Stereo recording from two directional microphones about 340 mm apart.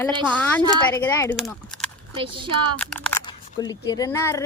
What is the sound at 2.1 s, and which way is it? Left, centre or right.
Speech, centre.